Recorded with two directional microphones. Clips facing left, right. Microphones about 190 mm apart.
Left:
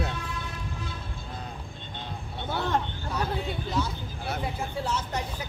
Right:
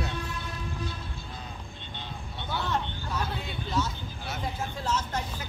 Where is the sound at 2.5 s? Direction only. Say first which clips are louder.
Left 3 dB; 50° left (ahead or behind).